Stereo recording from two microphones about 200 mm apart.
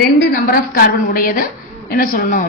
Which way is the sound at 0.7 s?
45° left (ahead or behind).